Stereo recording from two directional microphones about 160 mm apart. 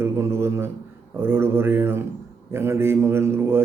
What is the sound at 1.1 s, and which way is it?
A man's voice, 15° right (ahead or behind).